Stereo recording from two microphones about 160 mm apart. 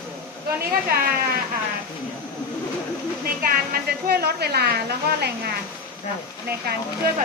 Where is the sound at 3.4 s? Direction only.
70° right (ahead or behind); by 4.6 s 85° right.